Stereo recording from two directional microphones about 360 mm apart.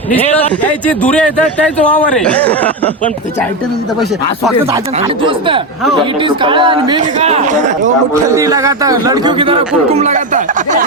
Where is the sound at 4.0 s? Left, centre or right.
Centre.